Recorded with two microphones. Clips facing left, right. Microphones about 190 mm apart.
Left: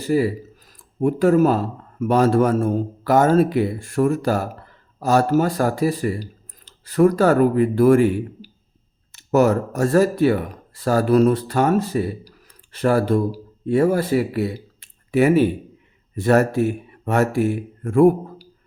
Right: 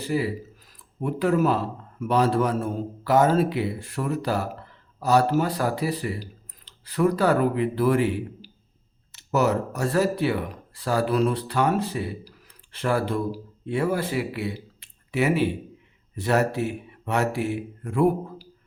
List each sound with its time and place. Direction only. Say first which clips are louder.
0.0 s speech: left 6 dB; 45° left (ahead or behind)